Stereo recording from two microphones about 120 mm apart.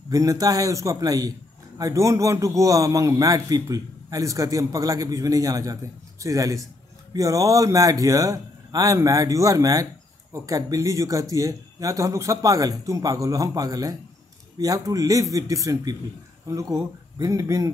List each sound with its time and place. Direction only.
0.1 s a man's voice: 30° right (ahead or behind)